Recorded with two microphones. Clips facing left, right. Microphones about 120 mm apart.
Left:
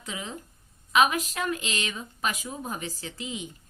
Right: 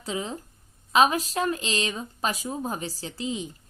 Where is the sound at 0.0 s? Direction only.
35° right (ahead or behind).